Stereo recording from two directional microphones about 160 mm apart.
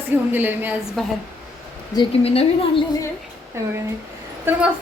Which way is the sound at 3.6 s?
15° right (ahead or behind).